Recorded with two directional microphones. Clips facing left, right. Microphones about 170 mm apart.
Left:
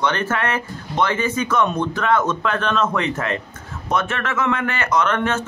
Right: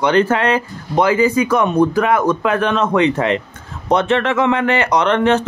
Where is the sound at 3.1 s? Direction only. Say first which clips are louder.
Right 7 dB; 25° right (ahead or behind).